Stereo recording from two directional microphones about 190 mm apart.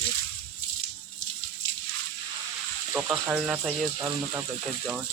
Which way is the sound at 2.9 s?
5° right (ahead or behind).